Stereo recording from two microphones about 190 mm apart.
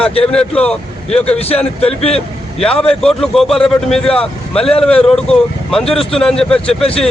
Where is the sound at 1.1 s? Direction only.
30° left (ahead or behind).